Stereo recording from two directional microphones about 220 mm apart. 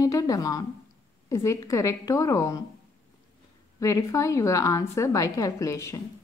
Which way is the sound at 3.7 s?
15° left (ahead or behind).